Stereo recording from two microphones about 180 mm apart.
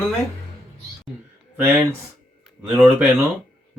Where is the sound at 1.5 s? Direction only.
10° right (ahead or behind).